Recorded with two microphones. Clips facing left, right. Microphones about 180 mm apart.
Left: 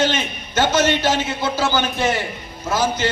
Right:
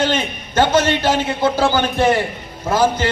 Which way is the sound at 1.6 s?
55° right (ahead or behind).